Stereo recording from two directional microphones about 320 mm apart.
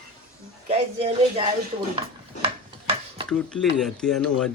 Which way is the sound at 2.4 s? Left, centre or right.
Centre.